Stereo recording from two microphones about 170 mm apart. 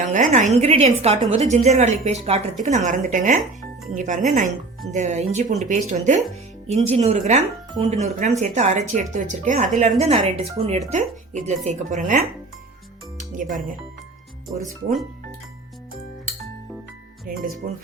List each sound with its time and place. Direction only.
0.0 s speech: 50° right (ahead or behind)
13.3 s speech: 50° right (ahead or behind)
17.3 s speech: 55° right (ahead or behind)